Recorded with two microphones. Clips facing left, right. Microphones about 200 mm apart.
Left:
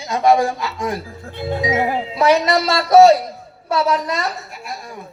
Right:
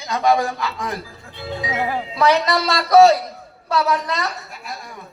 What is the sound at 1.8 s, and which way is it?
A man's voice, 25° left (ahead or behind).